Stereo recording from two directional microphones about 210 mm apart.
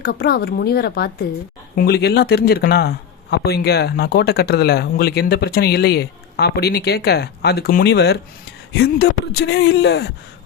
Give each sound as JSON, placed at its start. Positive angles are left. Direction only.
{"t": 0.0, "sound": "speech", "side_deg": 50}